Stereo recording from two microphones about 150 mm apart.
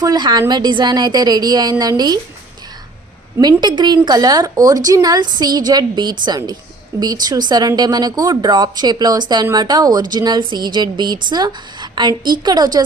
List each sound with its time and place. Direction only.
0.0 s a woman's voice: 25° right (ahead or behind)
3.3 s a woman's voice: 20° right (ahead or behind)
3.6 s a woman's voice: 30° right (ahead or behind)